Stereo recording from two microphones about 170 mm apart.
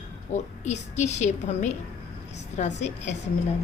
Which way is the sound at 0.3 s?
45° left (ahead or behind).